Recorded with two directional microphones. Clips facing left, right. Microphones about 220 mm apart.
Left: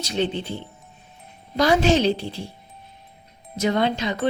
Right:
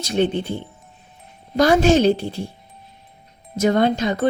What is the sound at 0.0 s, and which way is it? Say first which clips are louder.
Music: right 5 dB; 50° right (ahead or behind).